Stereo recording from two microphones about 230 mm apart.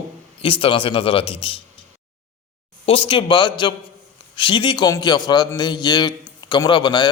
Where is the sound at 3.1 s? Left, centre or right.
Left.